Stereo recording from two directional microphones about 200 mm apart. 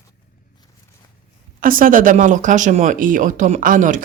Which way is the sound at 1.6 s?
45° right (ahead or behind).